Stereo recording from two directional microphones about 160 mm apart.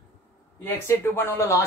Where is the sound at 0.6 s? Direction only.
15° left (ahead or behind).